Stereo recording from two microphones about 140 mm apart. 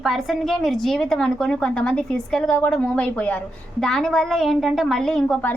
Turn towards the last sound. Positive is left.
turn(degrees=5)  # may be behind; listen again after turning